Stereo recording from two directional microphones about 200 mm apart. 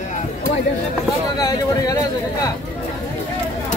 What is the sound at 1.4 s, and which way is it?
Speech, 20° left (ahead or behind).